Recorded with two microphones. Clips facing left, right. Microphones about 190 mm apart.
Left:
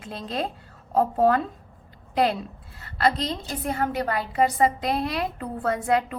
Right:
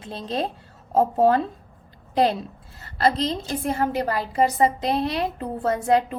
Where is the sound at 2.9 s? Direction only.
35° right (ahead or behind).